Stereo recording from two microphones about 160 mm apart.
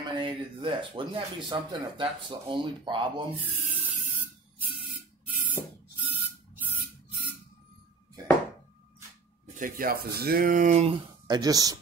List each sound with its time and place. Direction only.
0.2 s speech: 30° right (ahead or behind)
3.3 s speech: 10° right (ahead or behind)
5.5 s spray: 10° right (ahead or behind)
9.6 s speech: 65° right (ahead or behind)
11.2 s speech: 25° right (ahead or behind)